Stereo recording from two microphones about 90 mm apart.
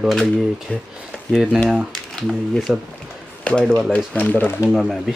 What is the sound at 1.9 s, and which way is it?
Speech, 5° left (ahead or behind).